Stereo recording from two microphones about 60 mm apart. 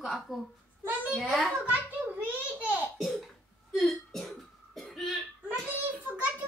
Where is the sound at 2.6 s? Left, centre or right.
Right.